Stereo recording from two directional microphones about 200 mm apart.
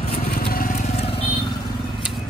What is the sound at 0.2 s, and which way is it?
Vehicle, 50° left (ahead or behind).